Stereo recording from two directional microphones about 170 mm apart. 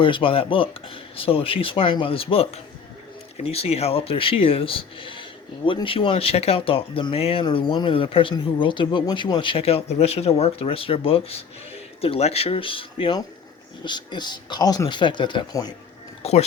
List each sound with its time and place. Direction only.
0.0 s speech: 30° left (ahead or behind)
16.2 s speech: 40° left (ahead or behind)